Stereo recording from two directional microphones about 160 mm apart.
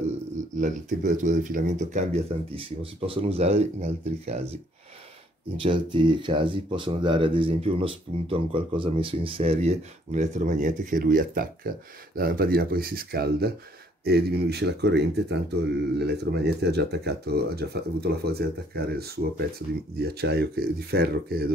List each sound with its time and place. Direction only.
0.6 s speech: 50° right (ahead or behind)
2.5 s speech: 35° right (ahead or behind)
5.6 s speech: 30° right (ahead or behind); by 13.5 s 75° right (ahead or behind)
14.0 s speech: 90° right; by 21.5 s 75° right (ahead or behind)